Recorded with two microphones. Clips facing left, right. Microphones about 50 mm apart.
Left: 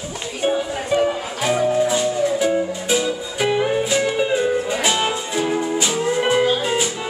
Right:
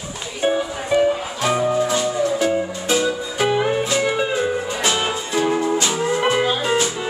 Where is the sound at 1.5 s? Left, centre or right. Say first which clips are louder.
Left 1 dB; right.